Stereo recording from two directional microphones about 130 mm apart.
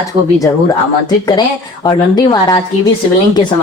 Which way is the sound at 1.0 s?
30° left (ahead or behind).